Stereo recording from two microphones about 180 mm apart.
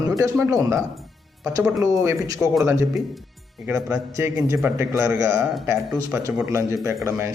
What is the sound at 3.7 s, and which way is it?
A man's voice, 15° right (ahead or behind).